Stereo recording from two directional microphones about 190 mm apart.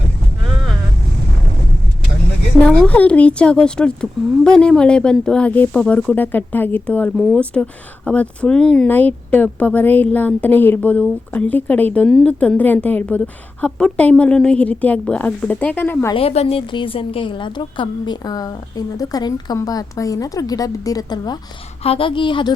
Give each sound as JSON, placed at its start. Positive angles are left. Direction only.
{"t": 0.4, "sound": "vehicle", "side_deg": 0}
{"t": 2.6, "sound": "speech", "side_deg": 5}
{"t": 16.1, "sound": "a woman's voice", "side_deg": 35}